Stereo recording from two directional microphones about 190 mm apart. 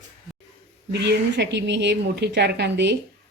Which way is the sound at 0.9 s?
65° right (ahead or behind).